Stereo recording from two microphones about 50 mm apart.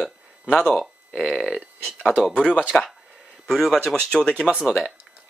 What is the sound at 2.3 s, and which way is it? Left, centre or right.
Speech, left.